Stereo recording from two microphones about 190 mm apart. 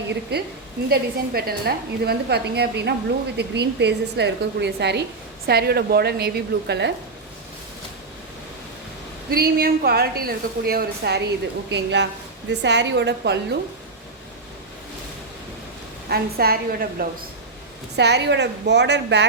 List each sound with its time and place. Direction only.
0.1 s a woman's voice: 60° right (ahead or behind)
9.3 s a woman's voice: 50° right (ahead or behind)
16.0 s a woman's voice: 55° right (ahead or behind)
17.9 s a woman's voice: 65° right (ahead or behind)